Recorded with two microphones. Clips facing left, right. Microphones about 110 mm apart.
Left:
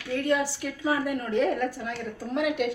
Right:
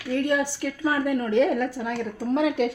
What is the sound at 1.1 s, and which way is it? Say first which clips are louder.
Speech: right 5 dB; 70° right (ahead or behind).